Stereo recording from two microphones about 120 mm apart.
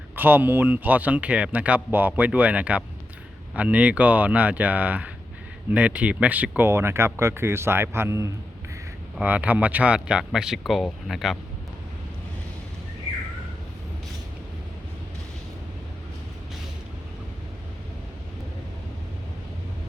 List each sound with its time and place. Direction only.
0.2 s speech: 15° right (ahead or behind); by 11.3 s centre (ahead or behind)